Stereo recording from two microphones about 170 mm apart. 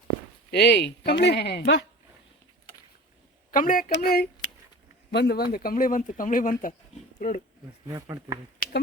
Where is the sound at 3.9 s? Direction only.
65° left (ahead or behind).